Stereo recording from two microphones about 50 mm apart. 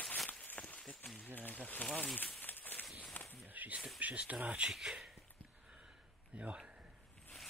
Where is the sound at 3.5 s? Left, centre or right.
Right.